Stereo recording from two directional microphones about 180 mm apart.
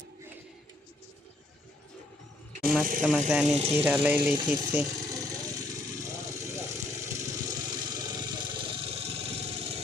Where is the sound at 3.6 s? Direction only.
35° right (ahead or behind).